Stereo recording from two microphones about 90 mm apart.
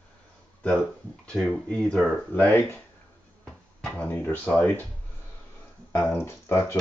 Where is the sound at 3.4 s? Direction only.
10° left (ahead or behind).